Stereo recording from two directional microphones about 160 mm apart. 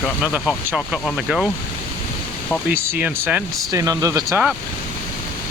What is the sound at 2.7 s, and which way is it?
Speech, 10° right (ahead or behind).